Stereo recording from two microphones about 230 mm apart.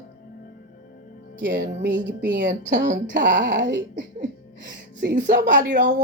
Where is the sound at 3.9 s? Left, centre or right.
Right.